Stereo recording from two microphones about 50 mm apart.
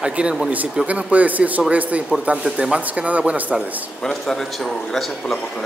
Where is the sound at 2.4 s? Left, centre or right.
Centre.